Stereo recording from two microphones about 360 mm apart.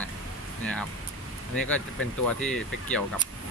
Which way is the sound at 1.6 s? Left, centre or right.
Centre.